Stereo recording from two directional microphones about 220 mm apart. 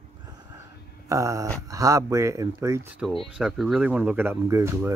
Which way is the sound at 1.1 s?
15° right (ahead or behind).